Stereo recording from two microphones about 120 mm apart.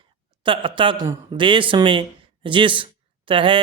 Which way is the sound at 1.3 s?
45° right (ahead or behind).